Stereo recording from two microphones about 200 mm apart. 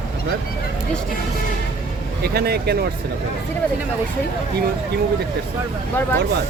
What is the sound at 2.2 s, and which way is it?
Speech, 55° right (ahead or behind).